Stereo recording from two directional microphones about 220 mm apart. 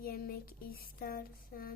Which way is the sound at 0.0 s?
45° left (ahead or behind).